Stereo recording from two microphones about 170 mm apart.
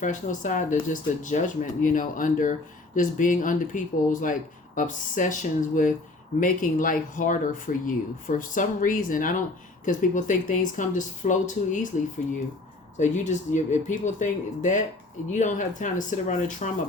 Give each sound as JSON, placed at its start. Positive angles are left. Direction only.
{"t": 0.0, "sound": "speech", "side_deg": 50}
{"t": 13.0, "sound": "speech", "side_deg": 45}